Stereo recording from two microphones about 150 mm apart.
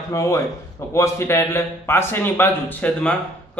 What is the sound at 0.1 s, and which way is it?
A man's voice, 20° left (ahead or behind).